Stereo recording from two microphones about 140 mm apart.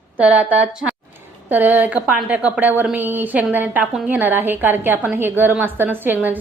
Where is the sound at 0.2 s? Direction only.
10° right (ahead or behind).